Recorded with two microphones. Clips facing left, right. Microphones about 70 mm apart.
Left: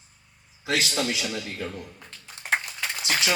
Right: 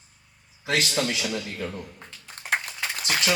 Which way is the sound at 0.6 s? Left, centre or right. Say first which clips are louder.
Right 1 dB; right.